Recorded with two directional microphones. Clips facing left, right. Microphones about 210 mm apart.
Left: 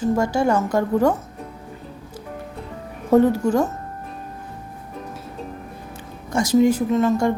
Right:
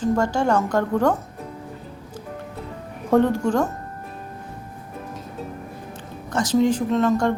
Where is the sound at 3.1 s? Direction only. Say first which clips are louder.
Left 2 dB; 5° left (ahead or behind).